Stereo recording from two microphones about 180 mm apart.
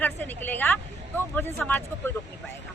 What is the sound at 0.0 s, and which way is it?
Speech, 10° left (ahead or behind).